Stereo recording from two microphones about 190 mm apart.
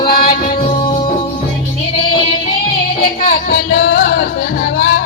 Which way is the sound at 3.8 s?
55° left (ahead or behind).